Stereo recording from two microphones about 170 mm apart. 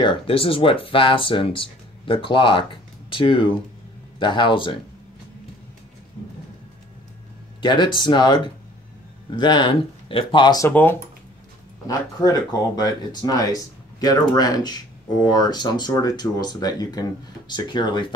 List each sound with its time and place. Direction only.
0.0 s speech: 30° left (ahead or behind)
7.6 s speech: 25° left (ahead or behind)
10.7 s speech: 10° left (ahead or behind)
12.2 s speech: 20° left (ahead or behind)